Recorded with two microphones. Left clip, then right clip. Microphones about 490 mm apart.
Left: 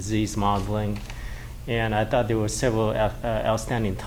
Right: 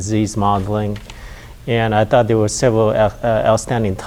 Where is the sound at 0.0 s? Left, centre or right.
Right.